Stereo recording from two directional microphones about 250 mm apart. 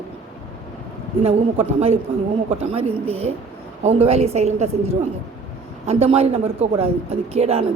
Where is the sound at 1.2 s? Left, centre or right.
Right.